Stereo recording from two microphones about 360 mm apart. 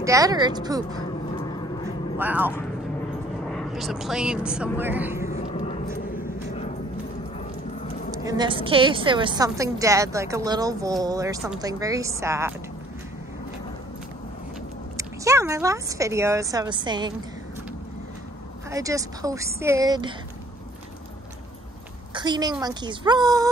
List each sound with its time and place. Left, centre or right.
0.0 s a woman's voice: centre
2.1 s speech: centre
5.3 s vehicle: centre
8.2 s a woman's voice: centre
15.0 s speech: centre
18.7 s a woman's voice: centre
22.1 s a woman's voice: centre